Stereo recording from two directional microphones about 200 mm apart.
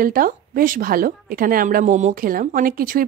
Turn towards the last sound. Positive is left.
turn(degrees=-45)  # may be behind; listen again after turning